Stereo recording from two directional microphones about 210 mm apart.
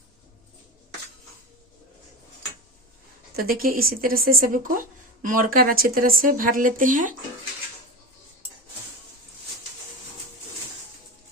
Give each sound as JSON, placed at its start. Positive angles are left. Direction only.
{"t": 3.3, "sound": "speech", "side_deg": -45}